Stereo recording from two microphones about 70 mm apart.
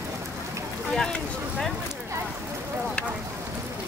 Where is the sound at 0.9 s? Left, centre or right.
Centre.